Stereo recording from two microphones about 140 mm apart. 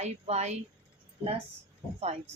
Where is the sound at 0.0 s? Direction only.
55° right (ahead or behind).